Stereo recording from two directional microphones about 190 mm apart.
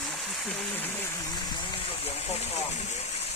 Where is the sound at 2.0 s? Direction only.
35° left (ahead or behind).